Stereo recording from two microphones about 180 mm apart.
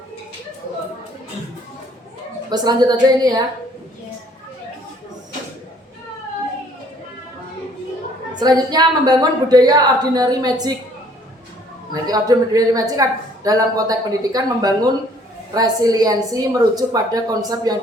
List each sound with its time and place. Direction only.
2.5 s speech: 20° right (ahead or behind)
8.4 s speech: 20° right (ahead or behind)
12.0 s speech: 20° right (ahead or behind)